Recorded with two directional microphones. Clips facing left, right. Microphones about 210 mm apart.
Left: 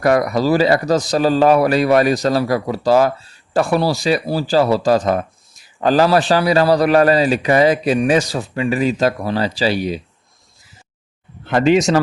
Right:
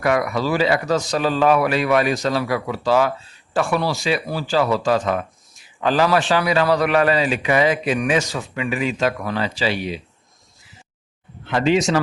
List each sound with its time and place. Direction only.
0.0 s speech: 40° left (ahead or behind)
11.4 s speech: 45° left (ahead or behind)